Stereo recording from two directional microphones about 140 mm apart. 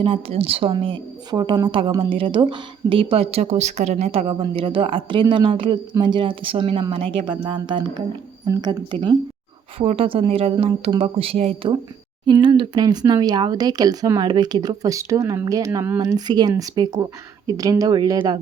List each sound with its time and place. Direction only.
0.0 s speech: 40° right (ahead or behind)
9.7 s speech: 40° right (ahead or behind)
12.2 s speech: 35° right (ahead or behind)